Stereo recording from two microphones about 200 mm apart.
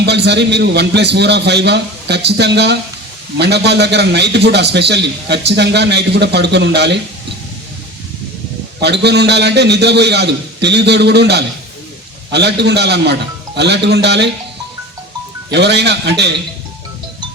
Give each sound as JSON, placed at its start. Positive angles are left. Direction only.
{"t": 0.0, "sound": "a man's voice", "side_deg": -55}
{"t": 8.8, "sound": "a man's voice", "side_deg": -60}
{"t": 15.5, "sound": "a man's voice", "side_deg": -60}